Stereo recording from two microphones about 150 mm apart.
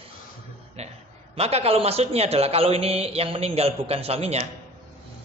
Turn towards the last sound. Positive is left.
turn(degrees=-45)  # may be behind; listen again after turning